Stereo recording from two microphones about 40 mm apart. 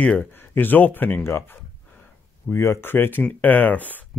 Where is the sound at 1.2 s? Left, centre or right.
Left.